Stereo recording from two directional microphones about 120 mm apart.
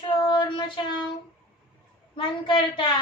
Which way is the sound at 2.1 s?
40° left (ahead or behind).